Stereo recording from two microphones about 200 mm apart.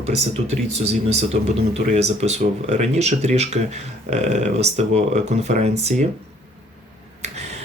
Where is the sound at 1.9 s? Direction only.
35° right (ahead or behind).